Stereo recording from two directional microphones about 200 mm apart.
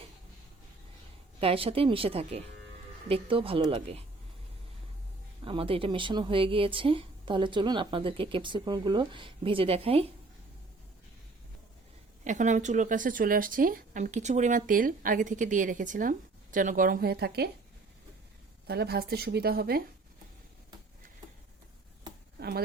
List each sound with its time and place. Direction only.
1.4 s speech: 30° right (ahead or behind)
5.5 s speech: 25° right (ahead or behind)
12.2 s speech: 40° right (ahead or behind)
18.7 s a woman's voice: 55° right (ahead or behind)
22.4 s a sound: 50° right (ahead or behind)